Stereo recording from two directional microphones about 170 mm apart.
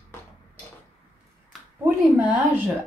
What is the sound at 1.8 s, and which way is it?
Speech, 10° right (ahead or behind).